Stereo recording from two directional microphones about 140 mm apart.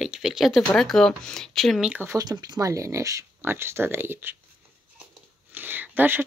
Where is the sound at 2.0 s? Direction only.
25° right (ahead or behind).